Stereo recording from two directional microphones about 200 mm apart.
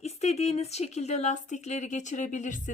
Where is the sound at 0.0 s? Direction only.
30° left (ahead or behind).